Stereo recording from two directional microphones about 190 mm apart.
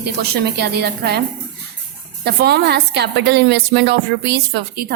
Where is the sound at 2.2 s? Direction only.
60° right (ahead or behind).